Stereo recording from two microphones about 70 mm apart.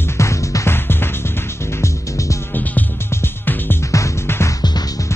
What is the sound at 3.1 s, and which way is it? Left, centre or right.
Music, left.